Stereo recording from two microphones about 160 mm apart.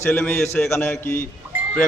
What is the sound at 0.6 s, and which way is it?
Speech, 15° left (ahead or behind).